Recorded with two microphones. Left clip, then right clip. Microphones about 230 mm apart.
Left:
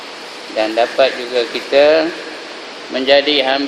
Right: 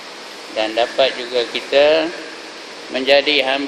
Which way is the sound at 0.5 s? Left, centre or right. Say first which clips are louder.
Left 3 dB; centre.